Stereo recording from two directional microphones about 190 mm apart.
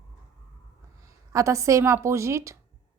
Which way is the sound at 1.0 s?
15° right (ahead or behind).